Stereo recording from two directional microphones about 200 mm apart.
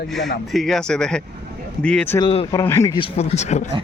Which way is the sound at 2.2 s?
30° left (ahead or behind).